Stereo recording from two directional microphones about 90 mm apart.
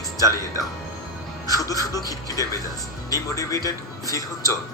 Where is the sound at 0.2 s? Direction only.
40° left (ahead or behind).